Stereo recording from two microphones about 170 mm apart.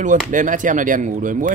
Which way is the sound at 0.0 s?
50° right (ahead or behind).